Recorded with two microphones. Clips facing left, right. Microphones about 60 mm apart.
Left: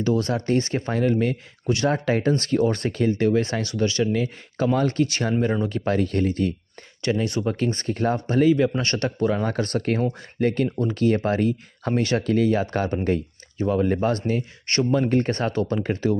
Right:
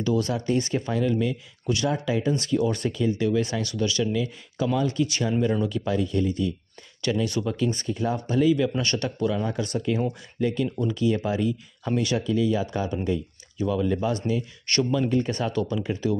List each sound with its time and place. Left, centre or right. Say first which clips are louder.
0.0 s speech: left 2 dB; left
2.0 s speech: left 3 dB; left
7.0 s speech: left 2 dB; left
9.4 s speech: left 3 dB; left
12.2 s speech: left 3 dB; left
13.6 s speech: left 3 dB; left